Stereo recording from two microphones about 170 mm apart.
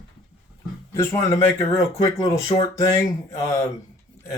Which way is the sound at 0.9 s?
15° left (ahead or behind).